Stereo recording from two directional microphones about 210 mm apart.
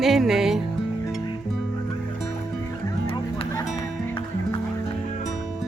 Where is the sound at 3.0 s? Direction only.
25° left (ahead or behind).